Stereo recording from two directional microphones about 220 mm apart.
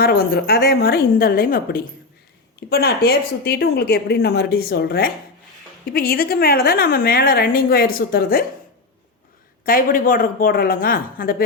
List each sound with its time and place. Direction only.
0.0 s a woman's voice: 45° left (ahead or behind)
9.6 s speech: 40° left (ahead or behind)